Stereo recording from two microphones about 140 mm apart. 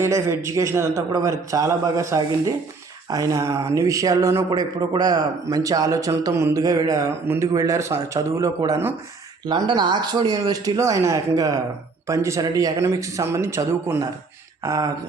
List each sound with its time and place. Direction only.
0.0 s speech: 20° right (ahead or behind)
9.5 s speech: 30° right (ahead or behind)